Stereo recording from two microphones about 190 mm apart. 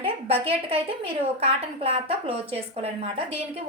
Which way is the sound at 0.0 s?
30° right (ahead or behind).